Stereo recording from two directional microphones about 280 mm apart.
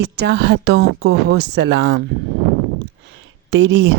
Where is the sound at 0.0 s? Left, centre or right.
Right.